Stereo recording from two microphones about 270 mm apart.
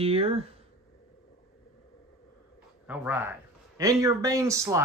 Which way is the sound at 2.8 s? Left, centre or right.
Centre.